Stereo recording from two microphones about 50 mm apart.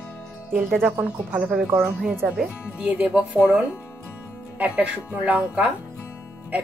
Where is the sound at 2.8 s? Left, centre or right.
Right.